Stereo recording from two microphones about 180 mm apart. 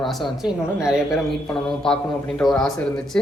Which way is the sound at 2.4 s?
5° left (ahead or behind).